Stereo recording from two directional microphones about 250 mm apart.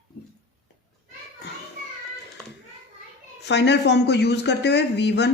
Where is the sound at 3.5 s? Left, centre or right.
Left.